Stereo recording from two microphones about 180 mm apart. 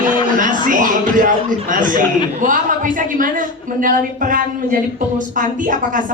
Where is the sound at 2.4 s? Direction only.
45° right (ahead or behind).